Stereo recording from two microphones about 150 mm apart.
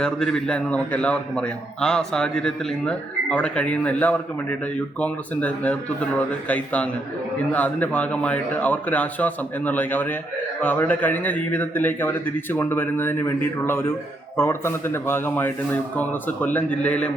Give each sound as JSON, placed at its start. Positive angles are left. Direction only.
{"t": 0.0, "sound": "a man's voice", "side_deg": 5}